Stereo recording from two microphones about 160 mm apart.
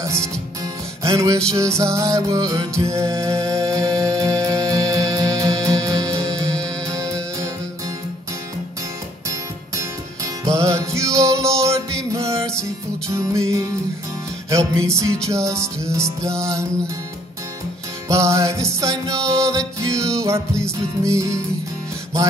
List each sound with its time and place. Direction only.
0.0 s music: 20° right (ahead or behind)
9.3 s music: 20° right (ahead or behind)
18.0 s music: 20° right (ahead or behind)